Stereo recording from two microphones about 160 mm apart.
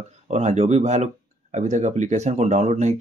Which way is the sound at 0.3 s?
45° right (ahead or behind).